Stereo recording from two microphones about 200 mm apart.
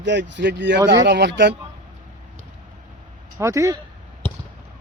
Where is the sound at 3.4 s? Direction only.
15° right (ahead or behind).